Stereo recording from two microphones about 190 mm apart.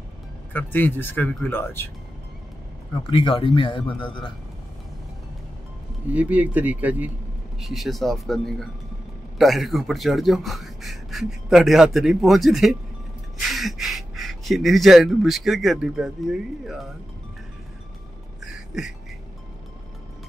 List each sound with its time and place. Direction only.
0.5 s speech: 10° left (ahead or behind)
2.9 s speech: 30° left (ahead or behind)
6.0 s speech: 10° right (ahead or behind)